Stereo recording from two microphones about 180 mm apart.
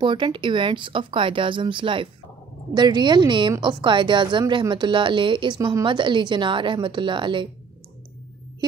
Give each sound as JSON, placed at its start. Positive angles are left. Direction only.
{"t": 0.0, "sound": "a woman's voice", "side_deg": -25}